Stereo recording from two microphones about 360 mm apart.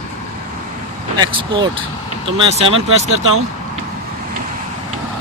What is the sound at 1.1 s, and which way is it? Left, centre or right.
Speech, centre.